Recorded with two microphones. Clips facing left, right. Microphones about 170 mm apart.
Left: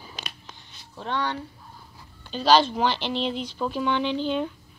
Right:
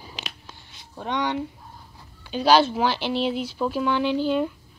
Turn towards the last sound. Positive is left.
turn(degrees=-5)  # may be behind; listen again after turning